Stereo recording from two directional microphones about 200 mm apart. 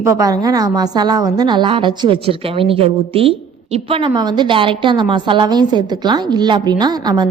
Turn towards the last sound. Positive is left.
turn(degrees=-20)  # may be behind; listen again after turning